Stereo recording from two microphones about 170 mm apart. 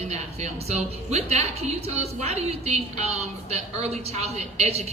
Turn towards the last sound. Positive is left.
turn(degrees=-40)  # may be behind; listen again after turning